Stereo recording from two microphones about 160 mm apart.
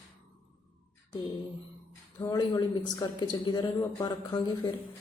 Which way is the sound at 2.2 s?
25° left (ahead or behind).